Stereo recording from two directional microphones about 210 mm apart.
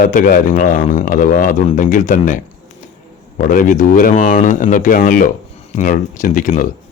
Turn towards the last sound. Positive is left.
turn(degrees=40)  # may be behind; listen again after turning